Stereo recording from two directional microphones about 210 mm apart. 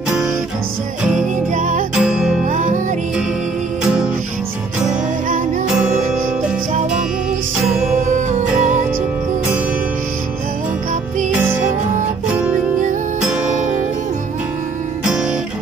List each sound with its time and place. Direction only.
1.5 s music: 40° right (ahead or behind)
2.0 s music: 5° right (ahead or behind)
2.5 s music: 35° right (ahead or behind)
3.8 s music: 5° right (ahead or behind)
13.2 s music: 5° right (ahead or behind)